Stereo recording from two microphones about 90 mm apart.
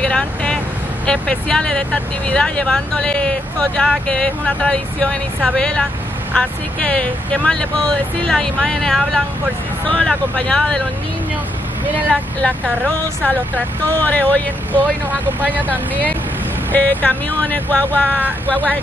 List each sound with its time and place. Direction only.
0.0 s vehicle: 10° left (ahead or behind)
1.0 s speech: 10° left (ahead or behind)
14.0 s speech: 15° left (ahead or behind)
15.4 s speech: 20° right (ahead or behind)
16.7 s speech: 15° left (ahead or behind)